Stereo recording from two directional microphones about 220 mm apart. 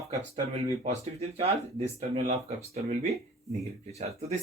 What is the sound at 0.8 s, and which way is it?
Speech, 30° right (ahead or behind).